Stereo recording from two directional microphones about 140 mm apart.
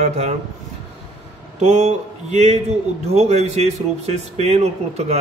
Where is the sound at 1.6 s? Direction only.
55° right (ahead or behind).